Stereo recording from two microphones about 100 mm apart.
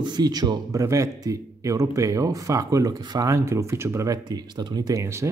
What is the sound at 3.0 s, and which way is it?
Speech, 45° right (ahead or behind).